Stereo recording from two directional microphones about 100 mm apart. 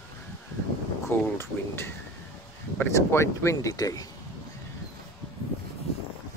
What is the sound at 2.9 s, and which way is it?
Speech, 30° left (ahead or behind).